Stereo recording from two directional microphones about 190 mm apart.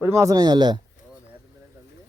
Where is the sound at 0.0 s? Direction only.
15° right (ahead or behind).